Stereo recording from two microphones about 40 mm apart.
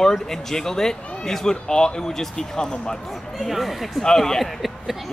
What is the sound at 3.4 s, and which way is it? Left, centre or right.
Speech, centre.